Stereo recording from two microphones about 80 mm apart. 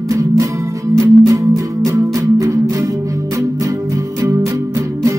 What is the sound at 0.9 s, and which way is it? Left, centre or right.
Music, right.